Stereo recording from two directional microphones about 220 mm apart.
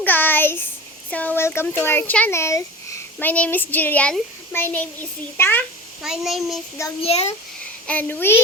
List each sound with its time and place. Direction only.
0.0 s a sound: 10° left (ahead or behind)
1.1 s a child's voice: 5° left (ahead or behind)
6.0 s a child's voice: centre (ahead or behind)
7.0 s a child's voice: 30° left (ahead or behind)
7.9 s a child's voice: 5° left (ahead or behind)